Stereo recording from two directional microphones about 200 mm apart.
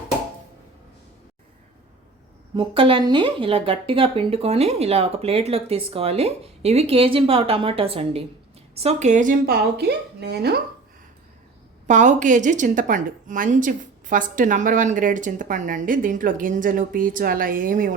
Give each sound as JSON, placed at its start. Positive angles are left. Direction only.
{"t": 2.6, "sound": "a woman's voice", "side_deg": -25}
{"t": 11.9, "sound": "a woman's voice", "side_deg": -40}